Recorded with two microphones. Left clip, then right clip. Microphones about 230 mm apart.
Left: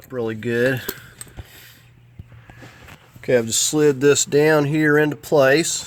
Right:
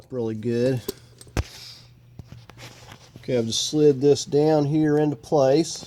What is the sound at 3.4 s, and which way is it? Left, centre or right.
Speech, left.